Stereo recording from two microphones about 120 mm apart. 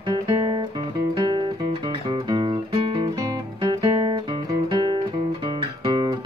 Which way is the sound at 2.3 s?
40° right (ahead or behind).